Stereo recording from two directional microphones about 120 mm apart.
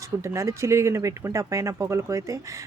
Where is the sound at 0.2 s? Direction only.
25° right (ahead or behind).